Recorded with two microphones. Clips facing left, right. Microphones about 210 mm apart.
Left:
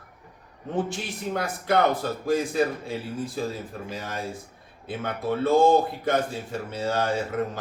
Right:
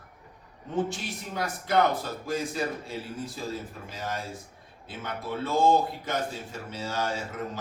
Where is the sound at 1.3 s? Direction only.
55° left (ahead or behind).